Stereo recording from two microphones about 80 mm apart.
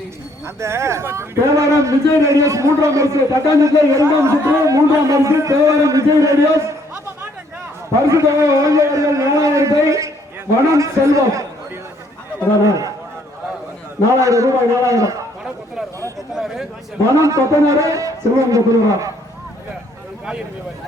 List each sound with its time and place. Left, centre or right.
0.4 s a man's voice: right
8.0 s a man's voice: right
12.6 s a man's voice: right
14.1 s a man's voice: right
16.3 s speech: centre
17.2 s a man's voice: right